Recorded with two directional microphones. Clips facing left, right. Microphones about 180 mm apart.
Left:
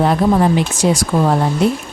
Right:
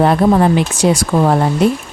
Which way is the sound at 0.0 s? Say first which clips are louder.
Right 2 dB; 60° right (ahead or behind).